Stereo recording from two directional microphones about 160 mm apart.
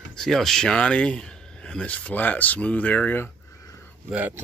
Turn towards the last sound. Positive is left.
turn(degrees=-10)  # may be behind; listen again after turning